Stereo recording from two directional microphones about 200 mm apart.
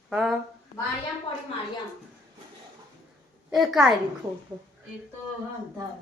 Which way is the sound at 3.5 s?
Centre (ahead or behind).